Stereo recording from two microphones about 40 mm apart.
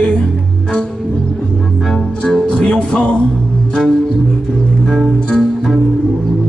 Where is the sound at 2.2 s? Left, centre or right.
Left.